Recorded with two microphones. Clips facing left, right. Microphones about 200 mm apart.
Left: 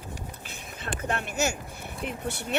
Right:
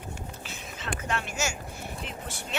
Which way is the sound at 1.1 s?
60° left (ahead or behind).